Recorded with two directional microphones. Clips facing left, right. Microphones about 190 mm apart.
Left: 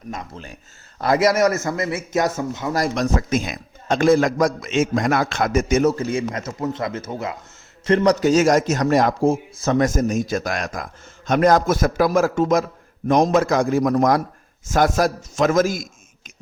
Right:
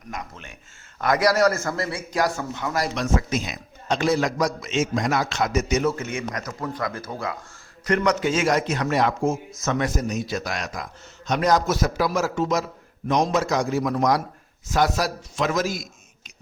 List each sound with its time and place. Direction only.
0.1 s a man's voice: 35° left (ahead or behind)
2.7 s a man's voice: 45° left (ahead or behind)